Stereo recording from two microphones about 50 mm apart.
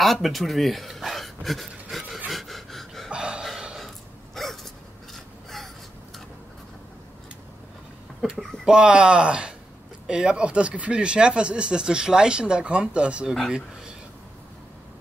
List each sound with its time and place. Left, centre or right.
0.0 s speech: centre
2.2 s pant: centre
3.1 s a sound: centre
4.4 s dog: centre
5.1 s a sound: centre
8.6 s speech: right